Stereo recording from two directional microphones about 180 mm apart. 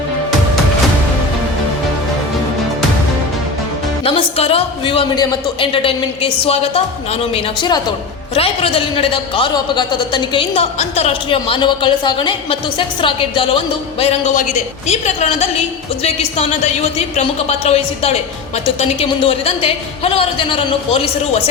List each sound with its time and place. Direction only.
4.0 s a man's voice: 30° left (ahead or behind)